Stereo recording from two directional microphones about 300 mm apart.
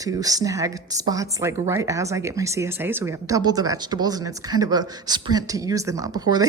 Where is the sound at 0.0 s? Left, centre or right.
Centre.